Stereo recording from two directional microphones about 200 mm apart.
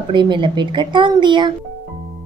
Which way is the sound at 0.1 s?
25° right (ahead or behind).